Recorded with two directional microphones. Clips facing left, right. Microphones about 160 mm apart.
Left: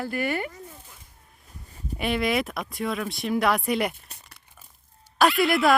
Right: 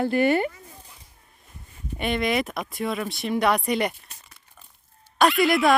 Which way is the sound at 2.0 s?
Centre (ahead or behind).